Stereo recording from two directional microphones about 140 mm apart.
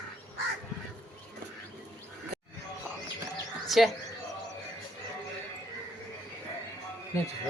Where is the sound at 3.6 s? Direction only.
Centre (ahead or behind).